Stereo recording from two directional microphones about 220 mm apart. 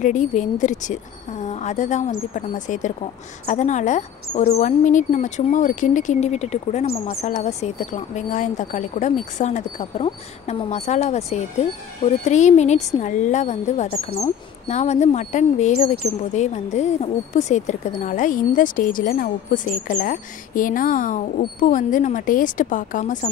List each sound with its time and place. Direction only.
0.0 s a woman's voice: 35° left (ahead or behind)